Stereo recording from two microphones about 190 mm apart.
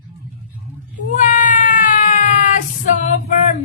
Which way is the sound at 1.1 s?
40° left (ahead or behind).